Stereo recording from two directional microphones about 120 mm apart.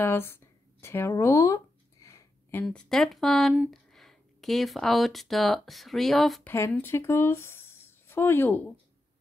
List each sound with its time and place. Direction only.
0.0 s a sound: 20° left (ahead or behind)
2.6 s speech: 5° left (ahead or behind)
6.4 s speech: 20° left (ahead or behind)